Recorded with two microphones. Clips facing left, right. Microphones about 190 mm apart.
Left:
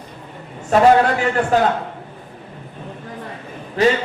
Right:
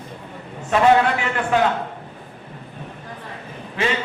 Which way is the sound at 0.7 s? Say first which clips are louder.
Left 3 dB; 40° left (ahead or behind).